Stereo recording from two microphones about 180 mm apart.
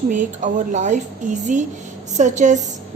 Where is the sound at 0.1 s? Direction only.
45° right (ahead or behind).